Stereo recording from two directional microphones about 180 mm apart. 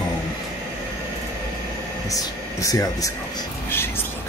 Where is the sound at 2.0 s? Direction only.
20° left (ahead or behind).